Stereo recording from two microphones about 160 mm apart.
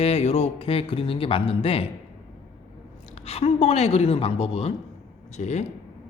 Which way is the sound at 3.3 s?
40° left (ahead or behind).